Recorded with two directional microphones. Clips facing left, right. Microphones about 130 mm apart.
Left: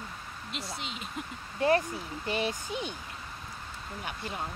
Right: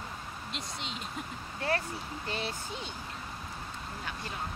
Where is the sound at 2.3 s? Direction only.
15° left (ahead or behind).